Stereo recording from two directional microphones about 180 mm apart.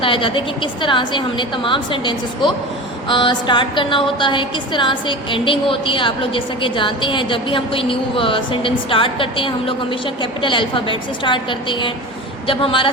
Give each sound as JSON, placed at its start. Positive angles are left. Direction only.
{"t": 0.0, "sound": "a woman's voice", "side_deg": 30}